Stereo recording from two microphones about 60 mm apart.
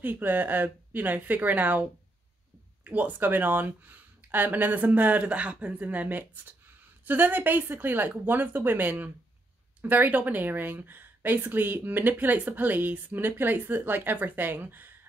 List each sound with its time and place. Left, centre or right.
0.0 s speech: right